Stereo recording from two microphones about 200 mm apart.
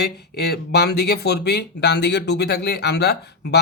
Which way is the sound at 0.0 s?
55° left (ahead or behind).